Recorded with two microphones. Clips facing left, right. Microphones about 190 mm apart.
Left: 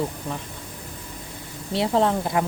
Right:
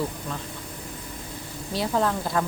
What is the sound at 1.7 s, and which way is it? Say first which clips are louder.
Speech: left 4 dB; 25° left (ahead or behind).